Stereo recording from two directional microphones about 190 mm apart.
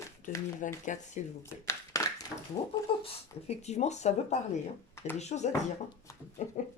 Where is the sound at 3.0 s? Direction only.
30° left (ahead or behind).